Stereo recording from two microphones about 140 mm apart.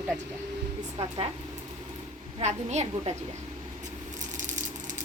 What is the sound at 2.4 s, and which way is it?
Speech, 55° right (ahead or behind).